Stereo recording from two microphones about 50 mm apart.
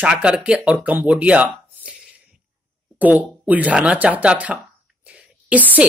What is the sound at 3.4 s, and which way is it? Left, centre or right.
Speech, right.